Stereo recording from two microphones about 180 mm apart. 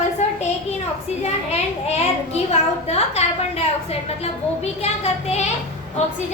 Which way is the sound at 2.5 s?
35° left (ahead or behind).